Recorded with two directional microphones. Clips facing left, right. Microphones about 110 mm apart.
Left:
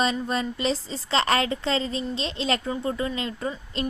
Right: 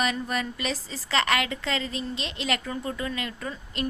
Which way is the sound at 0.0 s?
25° left (ahead or behind).